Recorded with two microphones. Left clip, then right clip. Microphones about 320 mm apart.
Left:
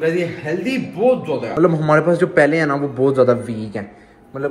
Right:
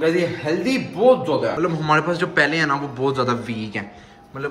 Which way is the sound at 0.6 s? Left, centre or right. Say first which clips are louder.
Even; right.